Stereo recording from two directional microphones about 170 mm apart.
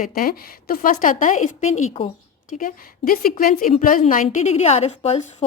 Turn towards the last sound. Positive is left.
turn(degrees=40)  # may be behind; listen again after turning